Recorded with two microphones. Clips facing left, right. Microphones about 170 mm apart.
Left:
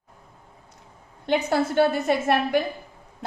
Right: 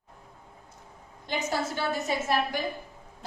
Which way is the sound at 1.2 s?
65° left (ahead or behind).